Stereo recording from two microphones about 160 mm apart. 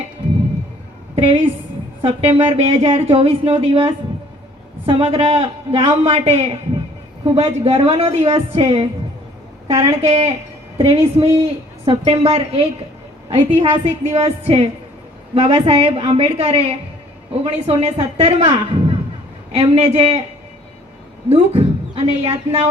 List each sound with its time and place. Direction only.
1.1 s a sound: 35° right (ahead or behind)
2.0 s a man's voice: 35° right (ahead or behind)
21.2 s a woman's voice: 40° right (ahead or behind)